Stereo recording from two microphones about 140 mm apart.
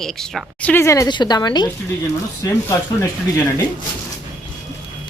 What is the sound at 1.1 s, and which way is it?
Speech, 30° left (ahead or behind).